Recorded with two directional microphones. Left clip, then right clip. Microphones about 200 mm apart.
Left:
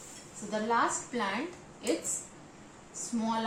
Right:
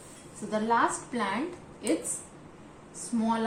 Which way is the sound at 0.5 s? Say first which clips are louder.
Right 3 dB; 15° left (ahead or behind).